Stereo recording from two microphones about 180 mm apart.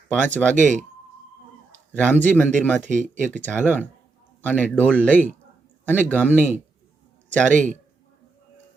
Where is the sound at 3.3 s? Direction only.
10° left (ahead or behind).